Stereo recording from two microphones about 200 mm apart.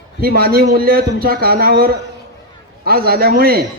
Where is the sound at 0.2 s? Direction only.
50° right (ahead or behind).